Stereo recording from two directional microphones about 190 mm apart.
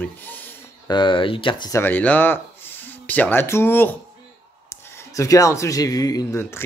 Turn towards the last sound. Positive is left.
turn(degrees=15)  # may be behind; listen again after turning